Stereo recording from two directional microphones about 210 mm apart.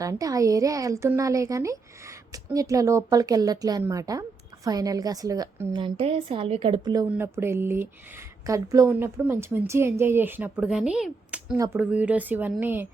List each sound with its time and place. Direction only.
0.0 s a woman's voice: 15° right (ahead or behind)